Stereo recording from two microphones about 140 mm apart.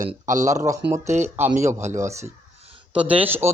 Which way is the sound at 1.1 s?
55° right (ahead or behind).